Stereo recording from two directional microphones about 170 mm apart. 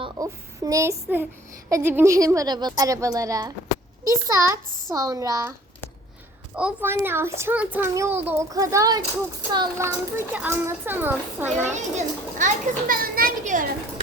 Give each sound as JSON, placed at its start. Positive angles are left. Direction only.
{"t": 0.0, "sound": "a sound", "side_deg": -20}
{"t": 1.7, "sound": "a woman's voice", "side_deg": -15}
{"t": 6.6, "sound": "a child's voice", "side_deg": -10}
{"t": 11.7, "sound": "a child's voice", "side_deg": -45}